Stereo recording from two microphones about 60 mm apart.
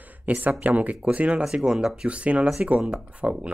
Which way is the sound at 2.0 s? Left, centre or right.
Right.